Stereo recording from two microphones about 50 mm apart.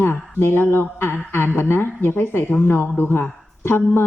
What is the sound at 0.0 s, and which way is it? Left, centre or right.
Mantra, left.